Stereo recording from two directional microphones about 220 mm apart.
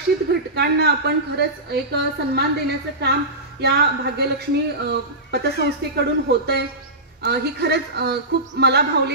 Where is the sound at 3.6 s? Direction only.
50° right (ahead or behind).